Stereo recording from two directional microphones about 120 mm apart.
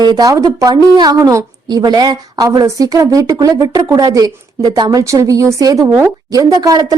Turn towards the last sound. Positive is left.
turn(degrees=-30)  # may be behind; listen again after turning